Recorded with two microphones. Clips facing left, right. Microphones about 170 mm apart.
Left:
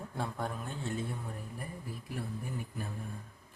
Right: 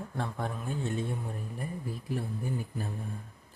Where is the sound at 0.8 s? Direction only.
20° right (ahead or behind).